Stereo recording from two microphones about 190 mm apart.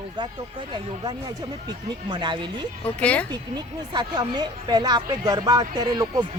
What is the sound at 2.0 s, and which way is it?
Speech, 25° right (ahead or behind).